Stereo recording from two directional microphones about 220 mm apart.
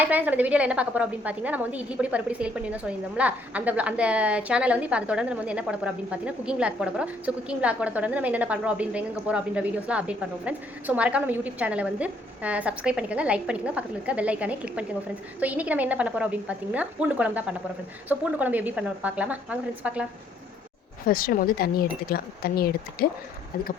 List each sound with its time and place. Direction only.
0.0 s a woman's voice: 10° right (ahead or behind)
21.1 s speech: 40° left (ahead or behind)